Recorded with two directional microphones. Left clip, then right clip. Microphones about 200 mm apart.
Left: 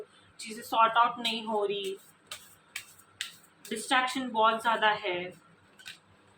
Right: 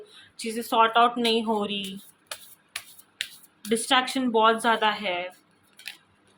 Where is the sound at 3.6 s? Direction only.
55° right (ahead or behind).